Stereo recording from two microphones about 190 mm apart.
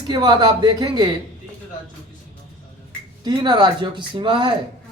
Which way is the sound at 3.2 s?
25° right (ahead or behind).